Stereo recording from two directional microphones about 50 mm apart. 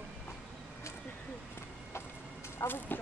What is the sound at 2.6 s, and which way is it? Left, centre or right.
Speech, left.